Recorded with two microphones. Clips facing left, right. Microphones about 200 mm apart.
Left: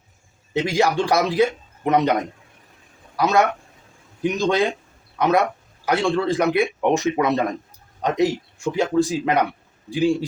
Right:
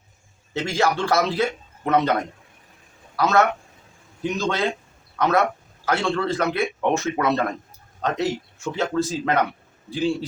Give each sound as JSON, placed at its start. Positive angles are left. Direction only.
{"t": 0.5, "sound": "a man's voice", "side_deg": 15}